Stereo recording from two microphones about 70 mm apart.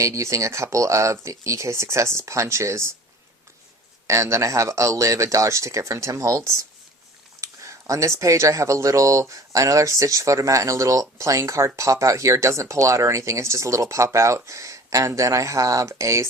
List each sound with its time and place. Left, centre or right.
0.0 s speech: right
4.0 s speech: right